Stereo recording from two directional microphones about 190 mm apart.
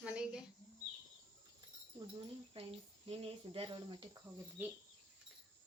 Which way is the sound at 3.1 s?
30° right (ahead or behind).